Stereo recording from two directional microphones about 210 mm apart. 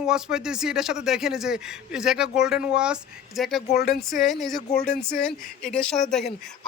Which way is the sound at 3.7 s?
50° left (ahead or behind).